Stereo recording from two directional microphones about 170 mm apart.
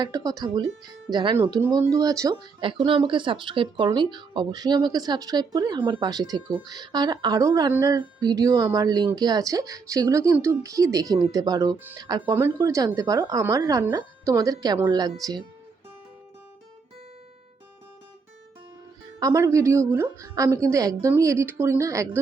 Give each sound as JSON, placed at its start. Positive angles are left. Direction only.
{"t": 0.0, "sound": "speech", "side_deg": -20}
{"t": 2.8, "sound": "speech", "side_deg": -30}
{"t": 19.2, "sound": "a woman's voice", "side_deg": -20}